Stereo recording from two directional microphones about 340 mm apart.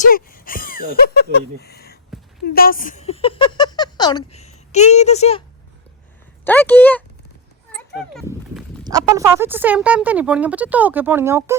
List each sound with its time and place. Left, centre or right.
0.1 s speech: left
6.4 s speech: centre
7.9 s a sound: centre
8.8 s speech: centre